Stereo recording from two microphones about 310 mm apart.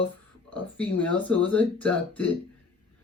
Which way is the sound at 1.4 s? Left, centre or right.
Centre.